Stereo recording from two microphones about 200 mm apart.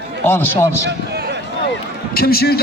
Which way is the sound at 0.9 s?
55° right (ahead or behind).